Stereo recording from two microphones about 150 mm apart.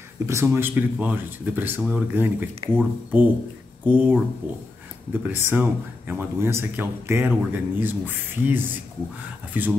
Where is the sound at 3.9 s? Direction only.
10° right (ahead or behind).